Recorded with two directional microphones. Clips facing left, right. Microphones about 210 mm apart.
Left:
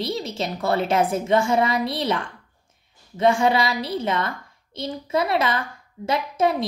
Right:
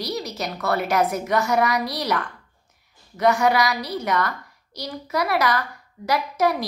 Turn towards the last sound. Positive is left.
turn(degrees=25)  # may be behind; listen again after turning